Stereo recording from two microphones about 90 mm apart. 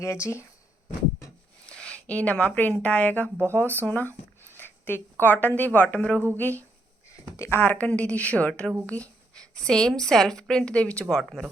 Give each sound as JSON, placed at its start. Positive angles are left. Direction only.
{"t": 0.0, "sound": "speech", "side_deg": 30}
{"t": 1.6, "sound": "speech", "side_deg": 10}
{"t": 3.8, "sound": "a sound", "side_deg": 20}
{"t": 5.2, "sound": "a woman's voice", "side_deg": 20}
{"t": 7.3, "sound": "speech", "side_deg": 35}
{"t": 7.6, "sound": "a woman's voice", "side_deg": 20}
{"t": 11.1, "sound": "speech", "side_deg": 0}